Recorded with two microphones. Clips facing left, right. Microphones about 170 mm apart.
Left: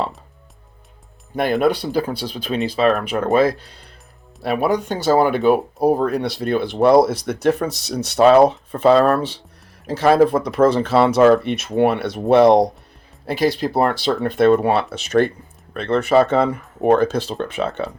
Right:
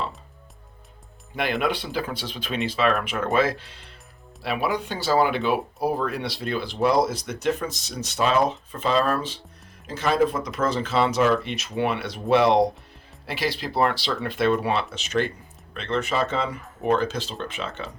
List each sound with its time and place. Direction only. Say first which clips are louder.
1.4 s speech: left 7 dB; 40° left (ahead or behind)
4.4 s speech: left 7 dB; 45° left (ahead or behind)